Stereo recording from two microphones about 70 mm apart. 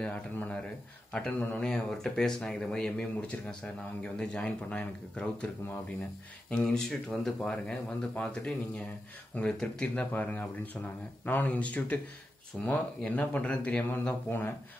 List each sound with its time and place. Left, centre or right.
0.0 s speech: left
6.5 s speech: centre